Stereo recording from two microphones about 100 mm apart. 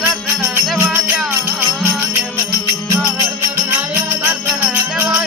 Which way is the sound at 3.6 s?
20° right (ahead or behind).